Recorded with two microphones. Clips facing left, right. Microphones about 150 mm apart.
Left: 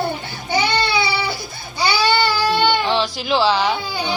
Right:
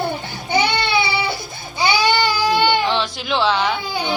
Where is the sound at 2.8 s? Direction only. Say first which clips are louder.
Left 1 dB; centre (ahead or behind).